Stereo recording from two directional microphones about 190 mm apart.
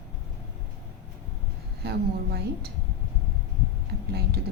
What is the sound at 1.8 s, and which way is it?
Speech, 60° right (ahead or behind).